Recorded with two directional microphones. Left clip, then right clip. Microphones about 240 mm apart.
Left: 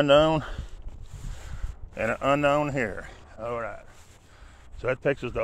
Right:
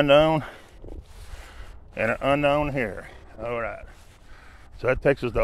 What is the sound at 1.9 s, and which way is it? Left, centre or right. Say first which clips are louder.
A man's voice: right 2 dB; centre.